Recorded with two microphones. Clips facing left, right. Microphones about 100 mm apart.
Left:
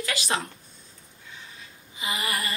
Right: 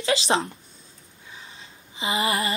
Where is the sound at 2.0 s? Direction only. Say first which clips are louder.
Right 6 dB; 25° right (ahead or behind).